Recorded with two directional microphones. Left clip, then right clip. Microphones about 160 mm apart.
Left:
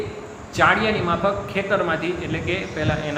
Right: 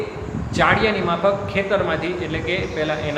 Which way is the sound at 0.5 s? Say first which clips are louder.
Even; 15° left (ahead or behind).